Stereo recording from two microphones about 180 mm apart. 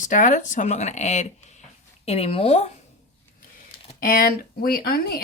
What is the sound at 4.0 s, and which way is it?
Speech, 50° left (ahead or behind).